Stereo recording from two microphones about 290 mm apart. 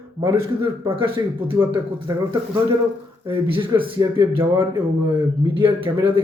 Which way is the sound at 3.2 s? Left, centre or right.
Centre.